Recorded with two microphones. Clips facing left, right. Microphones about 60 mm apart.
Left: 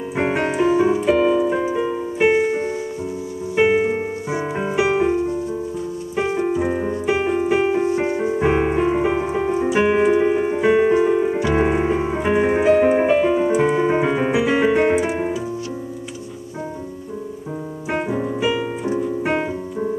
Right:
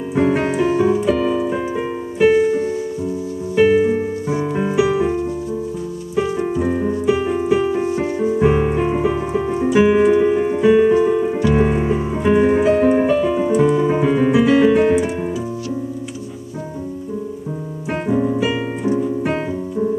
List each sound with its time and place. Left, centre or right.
0.2 s music: left
0.5 s music: centre
2.1 s music: left
6.7 s music: left
8.5 s music: left
9.7 s keyboard: centre; by 12.0 s left
12.0 s music: left
12.3 s music: centre
13.0 s piano: left
13.6 s keyboard: left
14.0 s keyboard: centre
14.7 s piano: left
18.0 s music: centre
19.2 s music: left